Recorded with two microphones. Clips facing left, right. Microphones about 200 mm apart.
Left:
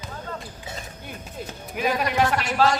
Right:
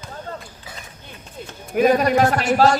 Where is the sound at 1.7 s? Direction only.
45° right (ahead or behind).